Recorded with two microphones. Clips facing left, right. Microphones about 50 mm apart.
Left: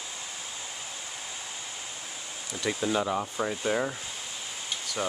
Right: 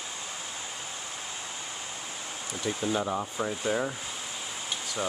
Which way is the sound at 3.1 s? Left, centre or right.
Centre.